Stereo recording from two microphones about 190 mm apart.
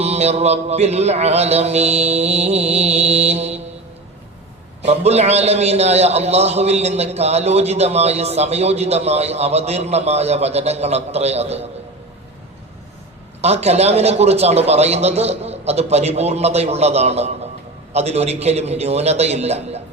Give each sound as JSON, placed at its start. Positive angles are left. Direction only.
{"t": 0.0, "sound": "a man's voice", "side_deg": -35}
{"t": 4.8, "sound": "a man's voice", "side_deg": -35}
{"t": 13.4, "sound": "a man's voice", "side_deg": -35}